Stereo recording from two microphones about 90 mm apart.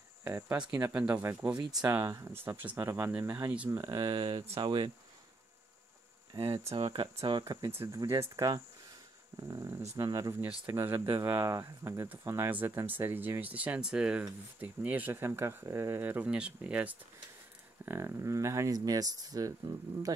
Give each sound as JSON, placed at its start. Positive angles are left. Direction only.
{"t": 0.2, "sound": "speech", "side_deg": -30}
{"t": 0.9, "sound": "speech", "side_deg": -15}
{"t": 1.6, "sound": "speech", "side_deg": -45}
{"t": 2.0, "sound": "speech", "side_deg": -30}
{"t": 3.7, "sound": "speech", "side_deg": -35}
{"t": 4.0, "sound": "speech", "side_deg": -60}
{"t": 6.3, "sound": "speech", "side_deg": -80}
{"t": 6.7, "sound": "speech", "side_deg": -90}
{"t": 7.9, "sound": "speech", "side_deg": -40}
{"t": 10.7, "sound": "speech", "side_deg": -25}
{"t": 16.3, "sound": "speech", "side_deg": -10}
{"t": 17.8, "sound": "speech", "side_deg": -30}